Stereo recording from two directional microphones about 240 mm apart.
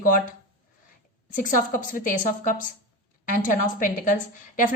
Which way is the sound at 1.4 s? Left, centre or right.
Left.